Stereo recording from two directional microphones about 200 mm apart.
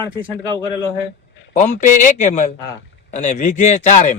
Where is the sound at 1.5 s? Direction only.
35° left (ahead or behind).